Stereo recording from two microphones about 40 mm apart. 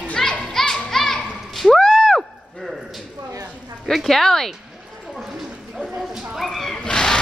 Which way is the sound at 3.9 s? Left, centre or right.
Centre.